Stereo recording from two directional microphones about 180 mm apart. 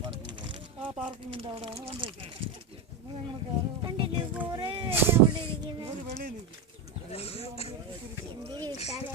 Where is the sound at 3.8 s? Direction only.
30° right (ahead or behind).